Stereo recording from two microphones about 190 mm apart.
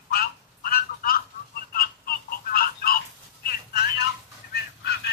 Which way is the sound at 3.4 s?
55° left (ahead or behind).